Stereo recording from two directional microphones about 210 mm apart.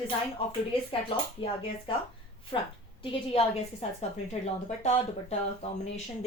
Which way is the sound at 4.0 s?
30° left (ahead or behind).